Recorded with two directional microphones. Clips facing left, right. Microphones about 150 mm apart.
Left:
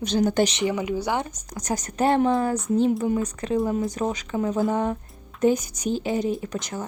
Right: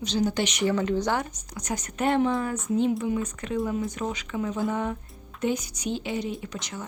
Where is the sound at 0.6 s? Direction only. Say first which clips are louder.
Even; 10° left (ahead or behind).